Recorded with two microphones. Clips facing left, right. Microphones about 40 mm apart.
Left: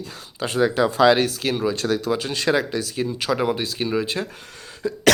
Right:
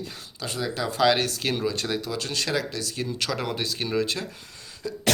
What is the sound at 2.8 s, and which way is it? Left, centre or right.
Speech, centre.